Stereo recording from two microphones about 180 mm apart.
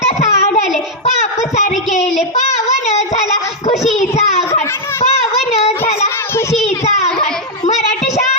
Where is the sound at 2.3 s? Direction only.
40° left (ahead or behind).